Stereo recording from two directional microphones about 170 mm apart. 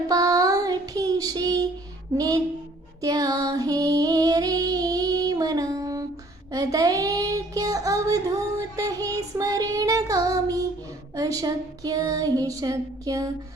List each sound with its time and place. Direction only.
0.1 s child singing: 20° right (ahead or behind)
2.1 s speech: 20° right (ahead or behind)
3.0 s female singing: 20° right (ahead or behind)
6.5 s child singing: 20° right (ahead or behind)
11.1 s a sound: 20° right (ahead or behind)